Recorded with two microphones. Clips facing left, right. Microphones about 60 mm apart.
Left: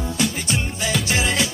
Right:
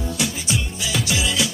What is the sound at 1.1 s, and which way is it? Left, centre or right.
Music, left.